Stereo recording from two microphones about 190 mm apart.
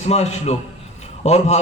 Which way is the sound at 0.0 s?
35° left (ahead or behind).